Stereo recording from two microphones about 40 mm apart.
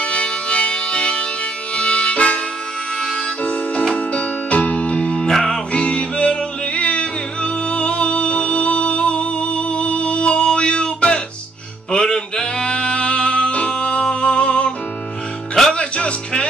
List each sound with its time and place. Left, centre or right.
0.0 s music: left
1.8 s harmonica: left
3.9 s music: left
5.3 s music: centre
5.7 s music: left
15.7 s music: left